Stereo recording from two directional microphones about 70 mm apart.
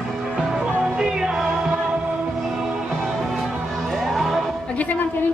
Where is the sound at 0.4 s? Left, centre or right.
Centre.